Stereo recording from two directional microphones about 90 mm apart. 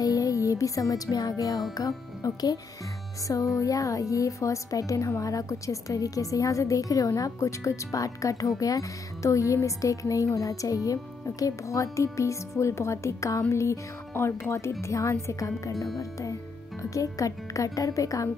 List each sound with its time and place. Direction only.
0.0 s music: 40° left (ahead or behind)
1.8 s speech: 40° left (ahead or behind)